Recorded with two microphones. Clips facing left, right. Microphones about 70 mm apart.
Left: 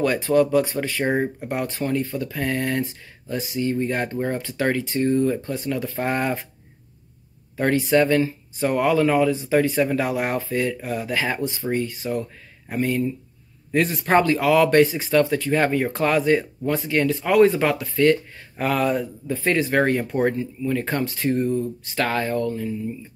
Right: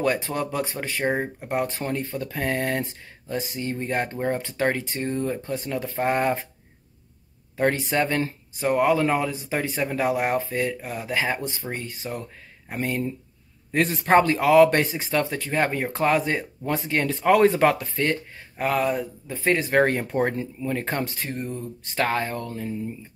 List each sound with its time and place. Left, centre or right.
0.0 s speech: right
1.0 s speech: centre
1.5 s speech: right
7.5 s speech: right
18.7 s speech: centre; by 22.8 s right